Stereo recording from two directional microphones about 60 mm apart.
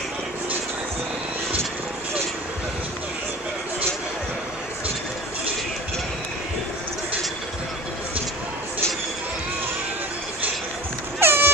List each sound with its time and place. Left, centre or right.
11.1 s vehicle: right